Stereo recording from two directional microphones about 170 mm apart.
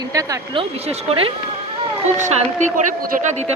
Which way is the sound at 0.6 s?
35° right (ahead or behind).